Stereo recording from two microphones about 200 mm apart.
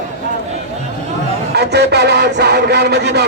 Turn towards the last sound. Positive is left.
turn(degrees=-55)  # may be behind; listen again after turning